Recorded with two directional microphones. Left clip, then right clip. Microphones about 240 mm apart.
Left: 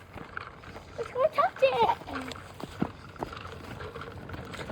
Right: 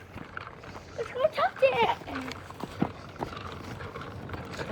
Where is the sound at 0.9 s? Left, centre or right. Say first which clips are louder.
Left 1 dB; centre.